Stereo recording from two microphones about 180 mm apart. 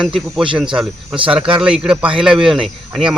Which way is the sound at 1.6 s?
5° right (ahead or behind).